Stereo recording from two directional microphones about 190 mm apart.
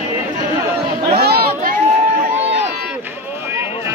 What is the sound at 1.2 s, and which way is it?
Chatter, 55° right (ahead or behind).